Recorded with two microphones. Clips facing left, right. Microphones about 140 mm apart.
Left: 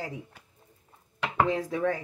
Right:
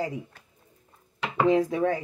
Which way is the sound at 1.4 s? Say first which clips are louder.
Right 5 dB; 20° right (ahead or behind).